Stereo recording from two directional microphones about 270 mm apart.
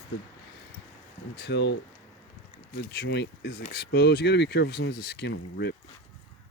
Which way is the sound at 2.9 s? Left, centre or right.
Left.